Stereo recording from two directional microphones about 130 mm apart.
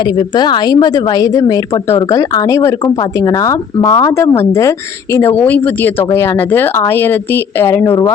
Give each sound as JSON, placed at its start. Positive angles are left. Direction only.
{"t": 0.0, "sound": "speech", "side_deg": 35}